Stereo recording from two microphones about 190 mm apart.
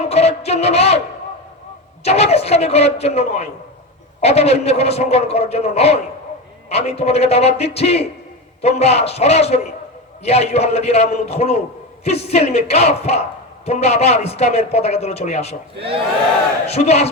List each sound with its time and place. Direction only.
0.1 s music: 35° left (ahead or behind)
2.0 s a man's voice: 35° left (ahead or behind)
16.6 s a man's voice: 35° left (ahead or behind)